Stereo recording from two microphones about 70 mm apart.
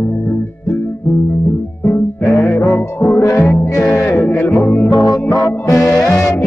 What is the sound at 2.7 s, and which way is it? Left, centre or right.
Music, left.